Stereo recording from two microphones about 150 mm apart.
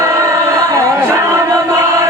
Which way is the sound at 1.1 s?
20° right (ahead or behind).